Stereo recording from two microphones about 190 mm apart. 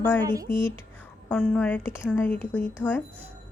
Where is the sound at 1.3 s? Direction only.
5° left (ahead or behind).